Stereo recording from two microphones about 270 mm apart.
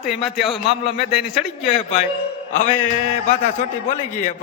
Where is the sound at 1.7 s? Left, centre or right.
Left.